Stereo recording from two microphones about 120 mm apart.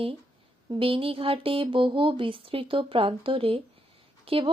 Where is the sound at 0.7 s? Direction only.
50° right (ahead or behind).